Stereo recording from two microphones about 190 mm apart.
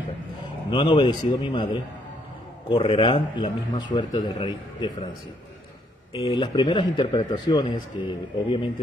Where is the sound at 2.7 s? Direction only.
30° left (ahead or behind).